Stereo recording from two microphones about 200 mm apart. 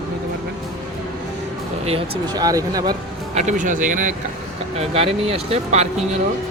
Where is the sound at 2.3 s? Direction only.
20° right (ahead or behind).